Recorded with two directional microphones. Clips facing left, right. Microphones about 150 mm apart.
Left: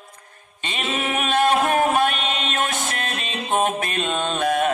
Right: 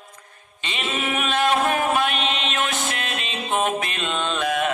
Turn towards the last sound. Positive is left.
turn(degrees=45)  # may be behind; listen again after turning